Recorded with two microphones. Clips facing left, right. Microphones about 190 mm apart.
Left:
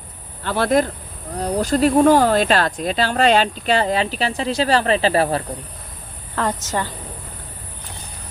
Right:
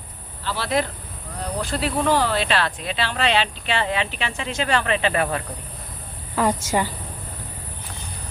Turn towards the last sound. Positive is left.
turn(degrees=-10)  # may be behind; listen again after turning